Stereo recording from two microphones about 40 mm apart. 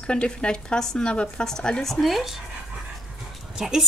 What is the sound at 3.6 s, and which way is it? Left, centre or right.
Speech, centre.